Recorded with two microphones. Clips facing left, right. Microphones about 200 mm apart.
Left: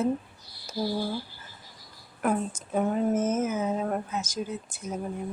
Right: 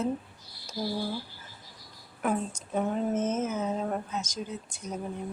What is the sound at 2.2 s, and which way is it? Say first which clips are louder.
Speech: left 2 dB; centre (ahead or behind).